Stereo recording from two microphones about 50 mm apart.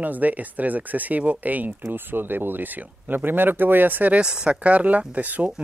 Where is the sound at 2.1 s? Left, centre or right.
Right.